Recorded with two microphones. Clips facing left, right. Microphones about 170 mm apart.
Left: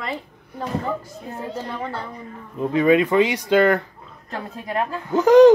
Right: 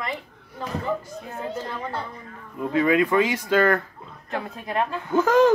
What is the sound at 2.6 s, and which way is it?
Speech, 25° left (ahead or behind).